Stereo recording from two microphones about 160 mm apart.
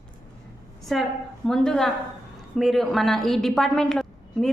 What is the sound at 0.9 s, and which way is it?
A woman's voice, centre (ahead or behind).